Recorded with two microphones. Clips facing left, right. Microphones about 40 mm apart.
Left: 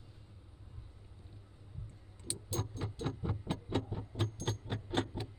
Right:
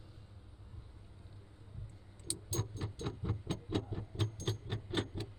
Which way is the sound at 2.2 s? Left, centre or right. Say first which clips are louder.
Left 1 dB; centre.